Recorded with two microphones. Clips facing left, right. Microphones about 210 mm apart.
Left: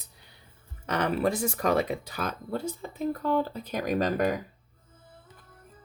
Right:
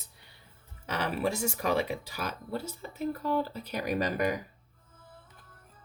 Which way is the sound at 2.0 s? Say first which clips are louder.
Left 3 dB; 10° right (ahead or behind).